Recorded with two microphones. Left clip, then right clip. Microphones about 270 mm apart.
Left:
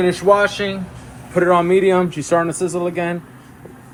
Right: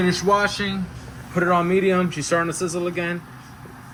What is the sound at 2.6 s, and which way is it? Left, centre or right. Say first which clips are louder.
Speech: left 5 dB; left.